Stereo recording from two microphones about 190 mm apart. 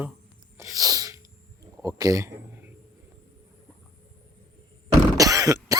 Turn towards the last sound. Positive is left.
turn(degrees=-20)  # may be behind; listen again after turning